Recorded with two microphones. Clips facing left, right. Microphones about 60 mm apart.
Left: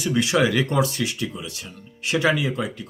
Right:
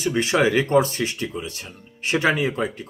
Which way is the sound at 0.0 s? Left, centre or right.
Right.